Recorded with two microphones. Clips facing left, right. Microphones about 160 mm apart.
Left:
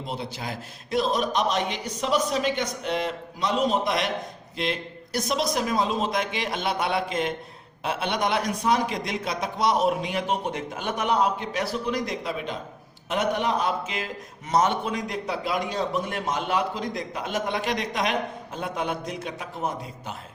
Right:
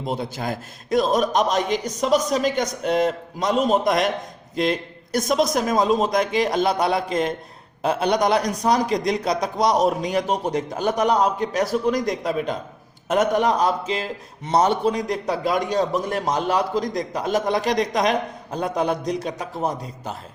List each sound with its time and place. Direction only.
0.0 s a man's voice: 45° right (ahead or behind)